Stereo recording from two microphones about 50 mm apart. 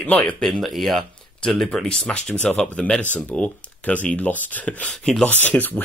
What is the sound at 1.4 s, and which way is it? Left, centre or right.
Speech, centre.